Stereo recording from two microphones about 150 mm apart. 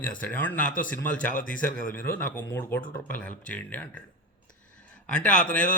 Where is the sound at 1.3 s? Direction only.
65° left (ahead or behind).